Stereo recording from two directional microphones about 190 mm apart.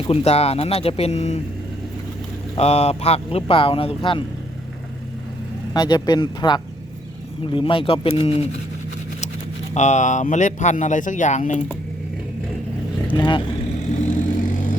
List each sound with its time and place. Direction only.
0.1 s speech: 35° left (ahead or behind)
2.6 s speech: 35° left (ahead or behind)
5.7 s speech: 20° left (ahead or behind)
9.7 s speech: 40° left (ahead or behind)
13.1 s speech: 25° left (ahead or behind)
13.9 s vehicle: 40° left (ahead or behind)